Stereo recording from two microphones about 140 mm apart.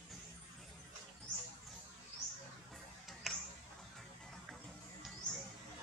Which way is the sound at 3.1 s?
Centre (ahead or behind).